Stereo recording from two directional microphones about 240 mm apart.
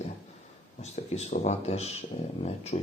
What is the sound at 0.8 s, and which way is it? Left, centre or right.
Speech, left.